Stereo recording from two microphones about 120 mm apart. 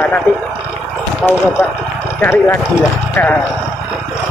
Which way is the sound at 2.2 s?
20° left (ahead or behind).